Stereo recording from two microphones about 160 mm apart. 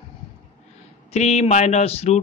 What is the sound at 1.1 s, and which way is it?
Speech, 45° left (ahead or behind).